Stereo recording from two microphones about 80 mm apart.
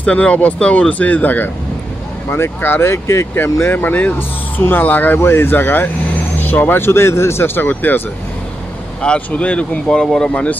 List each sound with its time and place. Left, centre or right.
0.0 s speech: centre
9.0 s speech: centre